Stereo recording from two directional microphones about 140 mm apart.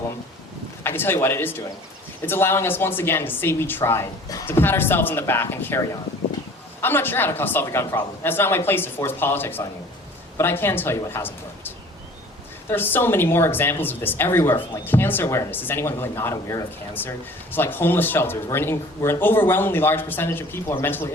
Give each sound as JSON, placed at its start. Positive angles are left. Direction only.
{"t": 0.9, "sound": "speech", "side_deg": 15}
{"t": 6.8, "sound": "speech", "side_deg": 15}
{"t": 12.7, "sound": "speech", "side_deg": 15}